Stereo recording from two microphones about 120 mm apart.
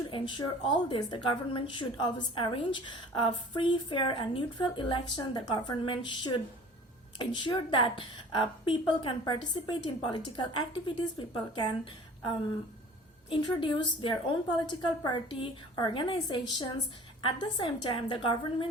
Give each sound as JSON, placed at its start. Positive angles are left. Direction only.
{"t": 0.1, "sound": "a woman's voice", "side_deg": 40}